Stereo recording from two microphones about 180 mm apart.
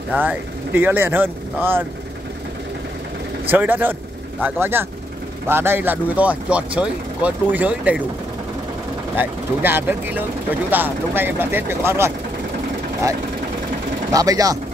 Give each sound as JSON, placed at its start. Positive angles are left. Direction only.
{"t": 0.1, "sound": "speech", "side_deg": -10}
{"t": 3.4, "sound": "speech", "side_deg": -10}
{"t": 9.1, "sound": "speech", "side_deg": -10}
{"t": 14.1, "sound": "speech", "side_deg": -20}